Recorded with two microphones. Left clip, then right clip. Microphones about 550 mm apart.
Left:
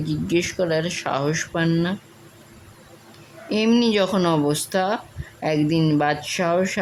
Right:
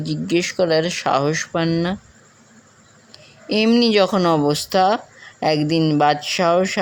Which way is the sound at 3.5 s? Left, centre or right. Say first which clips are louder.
Right 4 dB; left.